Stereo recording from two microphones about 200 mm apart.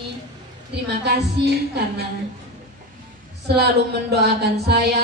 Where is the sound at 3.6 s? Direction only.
55° right (ahead or behind).